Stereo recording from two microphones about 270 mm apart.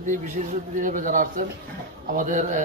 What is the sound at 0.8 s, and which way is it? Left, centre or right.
A man's voice, right.